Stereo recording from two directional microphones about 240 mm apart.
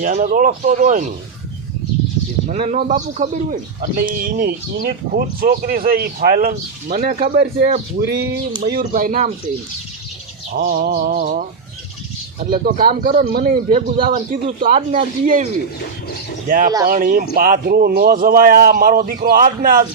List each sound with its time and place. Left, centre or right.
0.0 s speech: right
2.5 s speech: right
10.5 s speech: right
12.5 s speech: right
16.5 s speech: right